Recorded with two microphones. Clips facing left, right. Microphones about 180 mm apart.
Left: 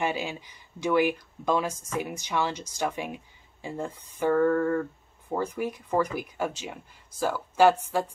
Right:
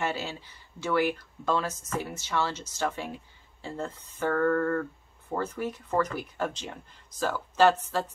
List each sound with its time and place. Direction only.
0.0 s speech: 15° left (ahead or behind)